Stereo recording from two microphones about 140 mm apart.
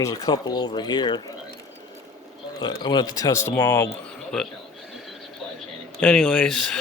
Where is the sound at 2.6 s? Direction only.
30° left (ahead or behind).